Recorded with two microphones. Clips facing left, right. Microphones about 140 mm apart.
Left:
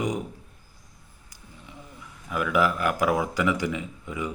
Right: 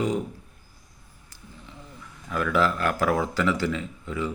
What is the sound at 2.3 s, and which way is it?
Speech, 10° left (ahead or behind).